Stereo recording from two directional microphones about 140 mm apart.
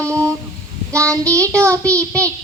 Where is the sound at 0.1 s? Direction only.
20° right (ahead or behind).